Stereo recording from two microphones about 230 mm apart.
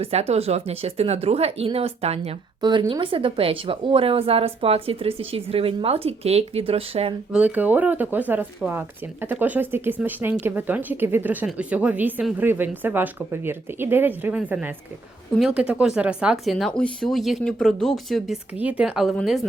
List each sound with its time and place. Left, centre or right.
0.0 s speech: right
7.3 s speech: centre